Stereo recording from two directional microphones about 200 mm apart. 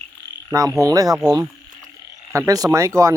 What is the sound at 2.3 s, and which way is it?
Speech, 15° right (ahead or behind).